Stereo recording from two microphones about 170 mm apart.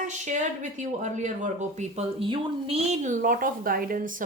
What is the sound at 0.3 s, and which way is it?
Speech, 45° right (ahead or behind).